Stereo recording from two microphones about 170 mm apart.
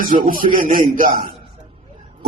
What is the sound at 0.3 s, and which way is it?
Speech, 55° right (ahead or behind).